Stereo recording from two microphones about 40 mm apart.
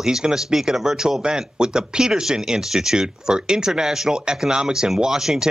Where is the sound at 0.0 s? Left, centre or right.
Centre.